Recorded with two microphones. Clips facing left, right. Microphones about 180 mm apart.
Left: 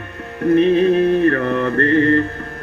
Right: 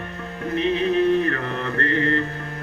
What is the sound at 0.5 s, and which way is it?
Mantra, 55° left (ahead or behind).